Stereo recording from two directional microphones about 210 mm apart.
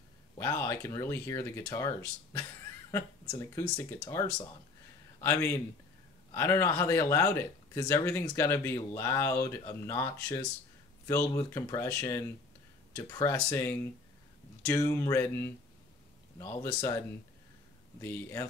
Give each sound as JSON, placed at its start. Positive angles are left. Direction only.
{"t": 0.4, "sound": "speech", "side_deg": 15}
{"t": 18.0, "sound": "speech", "side_deg": 15}